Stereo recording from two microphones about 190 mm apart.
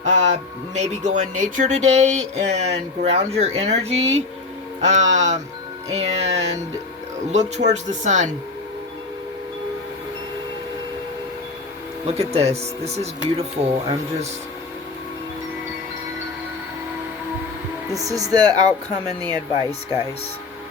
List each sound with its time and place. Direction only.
0.0 s speech: 40° right (ahead or behind)
12.3 s speech: 35° right (ahead or behind)
17.9 s speech: 20° right (ahead or behind)